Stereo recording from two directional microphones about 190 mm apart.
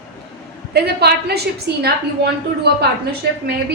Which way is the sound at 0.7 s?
60° right (ahead or behind).